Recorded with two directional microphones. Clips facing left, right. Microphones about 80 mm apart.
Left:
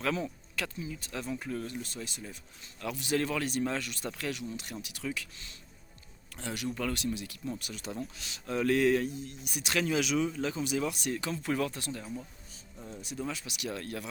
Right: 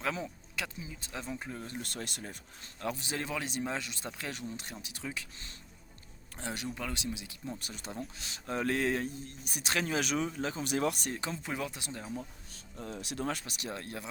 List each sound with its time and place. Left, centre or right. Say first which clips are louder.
0.0 s speech: left 3 dB; centre
1.8 s speech: even; right
2.8 s speech: left 5 dB; right
6.7 s speech: left 5 dB; centre
7.6 s speech: left 3 dB; right
10.6 s speech: right 3 dB; right
11.1 s speech: left 4 dB; right
11.5 s speech: left 5 dB; centre
11.9 s speech: even; right
12.7 s speech: right 1 dB; right
13.2 s speech: even; right